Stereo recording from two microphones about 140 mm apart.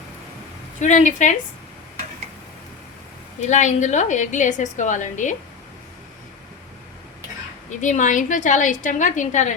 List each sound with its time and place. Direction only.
0.8 s a woman's voice: 60° left (ahead or behind)
3.5 s a woman's voice: 60° left (ahead or behind)
7.8 s a woman's voice: 65° left (ahead or behind)